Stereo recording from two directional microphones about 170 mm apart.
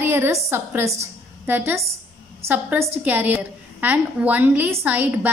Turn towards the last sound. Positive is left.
turn(degrees=-10)  # may be behind; listen again after turning